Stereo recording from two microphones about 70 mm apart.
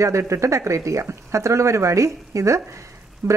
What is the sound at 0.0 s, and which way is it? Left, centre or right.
Speech, right.